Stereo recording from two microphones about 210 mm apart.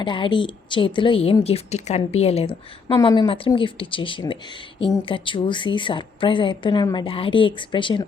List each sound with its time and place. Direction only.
0.0 s a woman's voice: 25° left (ahead or behind)